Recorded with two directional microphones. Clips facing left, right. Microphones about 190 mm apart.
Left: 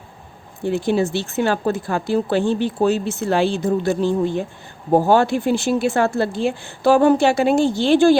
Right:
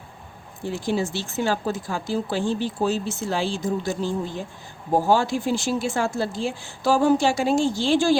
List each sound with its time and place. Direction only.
0.6 s speech: 60° left (ahead or behind)